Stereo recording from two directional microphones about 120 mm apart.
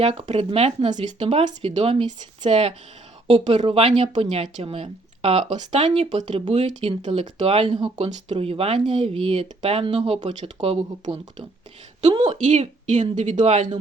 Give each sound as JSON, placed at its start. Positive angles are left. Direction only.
{"t": 0.0, "sound": "speech", "side_deg": -55}
{"t": 6.2, "sound": "speech", "side_deg": -50}
{"t": 10.2, "sound": "speech", "side_deg": -55}
{"t": 12.2, "sound": "speech", "side_deg": -70}